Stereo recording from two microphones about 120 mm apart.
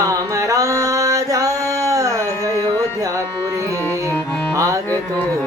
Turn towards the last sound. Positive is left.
turn(degrees=-25)  # may be behind; listen again after turning